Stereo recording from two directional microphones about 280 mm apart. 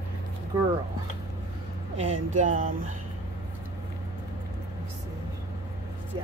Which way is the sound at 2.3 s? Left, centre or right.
Right.